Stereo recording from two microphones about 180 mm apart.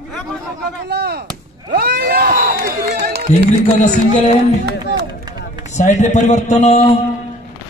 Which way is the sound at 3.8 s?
40° left (ahead or behind).